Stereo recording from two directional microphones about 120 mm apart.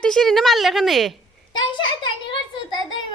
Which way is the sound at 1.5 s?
40° left (ahead or behind).